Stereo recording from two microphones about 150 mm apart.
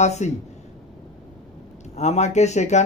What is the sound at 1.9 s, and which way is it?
Speech, 50° left (ahead or behind).